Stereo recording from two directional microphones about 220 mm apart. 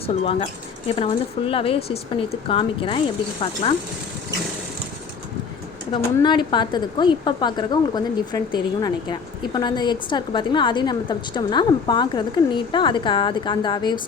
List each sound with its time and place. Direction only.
0.0 s a woman's voice: 25° left (ahead or behind)
5.9 s a woman's voice: 20° left (ahead or behind)